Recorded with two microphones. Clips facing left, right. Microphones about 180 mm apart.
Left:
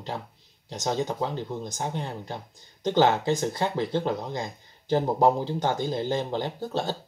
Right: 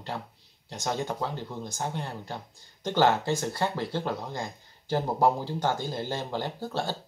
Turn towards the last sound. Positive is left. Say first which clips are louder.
# left 2 dB
turn(degrees=20)  # may be behind; listen again after turning